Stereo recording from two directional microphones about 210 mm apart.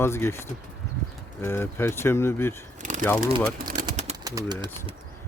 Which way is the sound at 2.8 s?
40° right (ahead or behind).